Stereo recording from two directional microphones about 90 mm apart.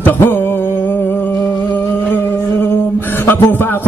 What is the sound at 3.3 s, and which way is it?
Speech, 25° left (ahead or behind).